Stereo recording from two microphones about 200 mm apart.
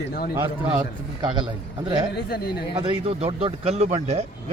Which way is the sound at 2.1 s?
50° left (ahead or behind).